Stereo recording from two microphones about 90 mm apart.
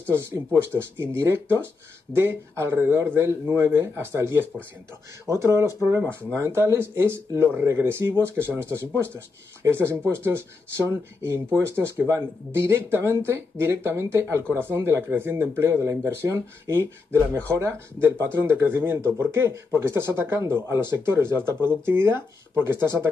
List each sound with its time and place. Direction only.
0.1 s speech: 25° right (ahead or behind)